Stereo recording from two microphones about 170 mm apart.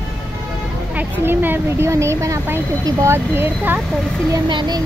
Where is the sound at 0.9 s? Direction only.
10° right (ahead or behind).